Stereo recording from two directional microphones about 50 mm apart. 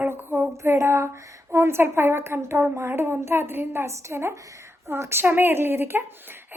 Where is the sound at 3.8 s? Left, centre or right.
Right.